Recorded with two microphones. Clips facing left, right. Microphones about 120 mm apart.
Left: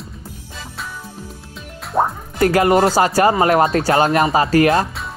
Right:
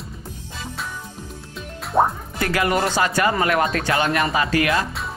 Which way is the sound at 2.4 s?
35° left (ahead or behind).